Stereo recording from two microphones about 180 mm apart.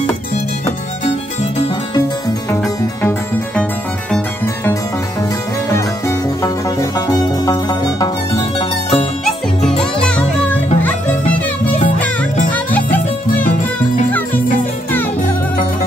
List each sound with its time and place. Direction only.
2.5 s music: 15° left (ahead or behind)
5.7 s music: 15° left (ahead or behind)
8.4 s music: 30° left (ahead or behind)
9.2 s music: 5° left (ahead or behind)
12.4 s music: 10° left (ahead or behind)